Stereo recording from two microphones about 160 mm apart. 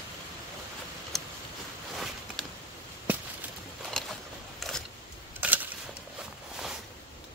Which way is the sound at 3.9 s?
5° left (ahead or behind).